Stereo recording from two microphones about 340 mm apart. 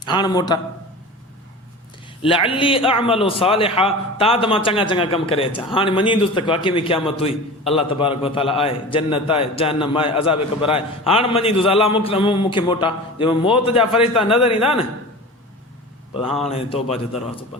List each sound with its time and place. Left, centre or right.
0.0 s a man's voice: centre
2.2 s a man's voice: centre
16.2 s speech: centre
16.5 s a man's voice: centre